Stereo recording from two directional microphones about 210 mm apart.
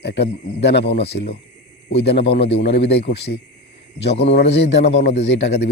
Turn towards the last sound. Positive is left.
turn(degrees=60)  # may be behind; listen again after turning